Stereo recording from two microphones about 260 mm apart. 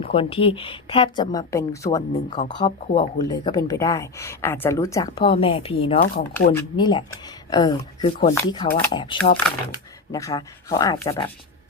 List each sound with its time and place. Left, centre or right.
0.0 s a woman's voice: left
3.2 s speech: centre